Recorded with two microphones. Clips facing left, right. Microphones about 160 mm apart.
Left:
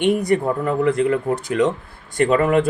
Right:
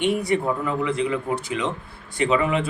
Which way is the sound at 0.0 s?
50° left (ahead or behind).